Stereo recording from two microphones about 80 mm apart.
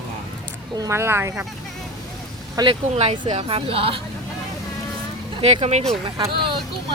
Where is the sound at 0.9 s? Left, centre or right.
Right.